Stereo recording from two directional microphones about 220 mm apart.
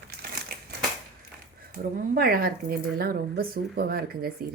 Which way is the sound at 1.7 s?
45° right (ahead or behind).